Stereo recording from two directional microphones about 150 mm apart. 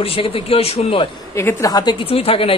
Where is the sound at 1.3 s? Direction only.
20° left (ahead or behind); by 2.5 s 40° left (ahead or behind).